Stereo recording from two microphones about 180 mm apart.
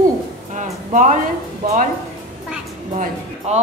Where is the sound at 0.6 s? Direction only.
45° right (ahead or behind).